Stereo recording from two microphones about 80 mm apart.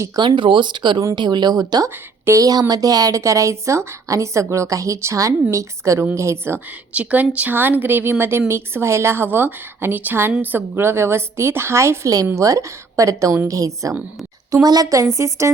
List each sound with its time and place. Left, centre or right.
0.2 s speech: right
1.1 s speech: right
2.2 s a woman's voice: right
6.9 s a woman's voice: centre; by 13.9 s right
14.5 s a woman's voice: right